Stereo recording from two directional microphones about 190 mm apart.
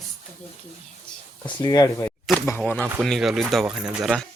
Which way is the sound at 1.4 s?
20° left (ahead or behind).